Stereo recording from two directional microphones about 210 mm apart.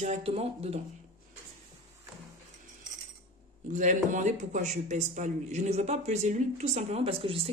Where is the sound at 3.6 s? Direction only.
35° right (ahead or behind).